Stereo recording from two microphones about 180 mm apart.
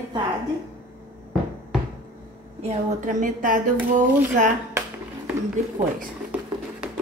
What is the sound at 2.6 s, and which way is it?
Speech, 45° right (ahead or behind).